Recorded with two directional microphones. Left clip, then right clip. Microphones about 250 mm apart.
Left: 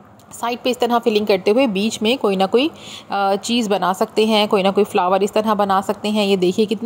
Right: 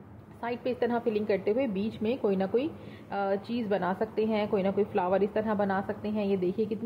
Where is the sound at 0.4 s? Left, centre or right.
Left.